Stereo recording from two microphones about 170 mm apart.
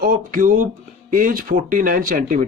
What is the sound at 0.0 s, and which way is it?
Speech, 55° right (ahead or behind).